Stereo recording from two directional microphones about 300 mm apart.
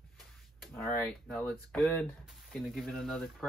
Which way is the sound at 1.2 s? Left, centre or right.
Centre.